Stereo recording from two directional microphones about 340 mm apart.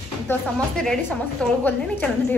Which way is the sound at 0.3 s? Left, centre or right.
Centre.